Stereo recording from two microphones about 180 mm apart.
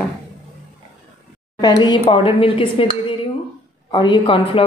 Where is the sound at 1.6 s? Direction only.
25° left (ahead or behind).